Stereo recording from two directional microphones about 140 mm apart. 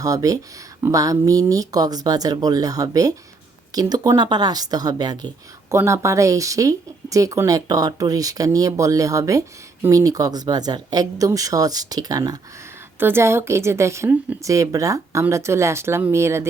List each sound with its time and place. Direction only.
0.0 s speech: 25° right (ahead or behind)
13.0 s speech: 15° right (ahead or behind)